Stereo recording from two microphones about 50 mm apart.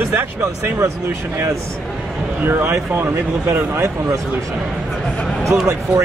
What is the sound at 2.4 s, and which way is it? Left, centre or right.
Speech, right.